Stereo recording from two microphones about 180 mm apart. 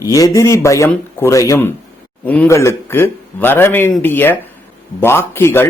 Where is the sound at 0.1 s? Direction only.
20° left (ahead or behind).